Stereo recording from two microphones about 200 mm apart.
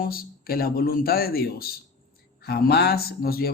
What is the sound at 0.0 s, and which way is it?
Speech, 45° left (ahead or behind).